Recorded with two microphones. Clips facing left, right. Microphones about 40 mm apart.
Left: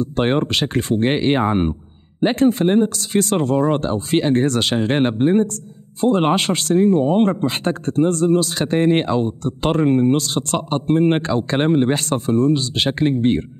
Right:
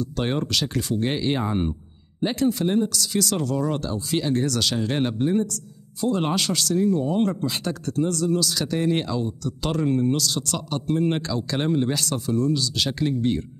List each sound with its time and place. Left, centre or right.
0.0 s speech: left